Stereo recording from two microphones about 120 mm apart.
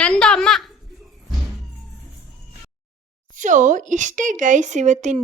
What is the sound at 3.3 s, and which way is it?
A woman's voice, 90° right.